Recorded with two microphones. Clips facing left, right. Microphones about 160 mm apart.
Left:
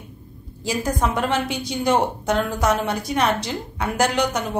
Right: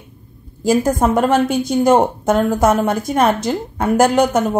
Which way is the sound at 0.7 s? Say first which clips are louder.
Right 8 dB; 50° right (ahead or behind).